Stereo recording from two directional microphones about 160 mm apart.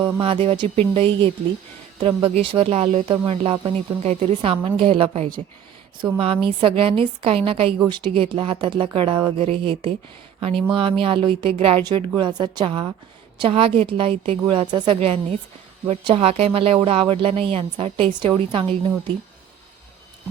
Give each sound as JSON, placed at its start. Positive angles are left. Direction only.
{"t": 0.2, "sound": "a woman's voice", "side_deg": -35}